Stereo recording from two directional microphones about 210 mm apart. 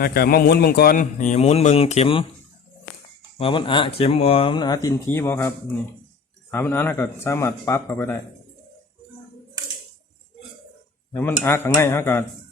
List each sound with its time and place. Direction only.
0.0 s a man's voice: 45° left (ahead or behind); by 2.2 s 25° left (ahead or behind)
3.3 s speech: 25° left (ahead or behind)
11.1 s speech: 10° left (ahead or behind)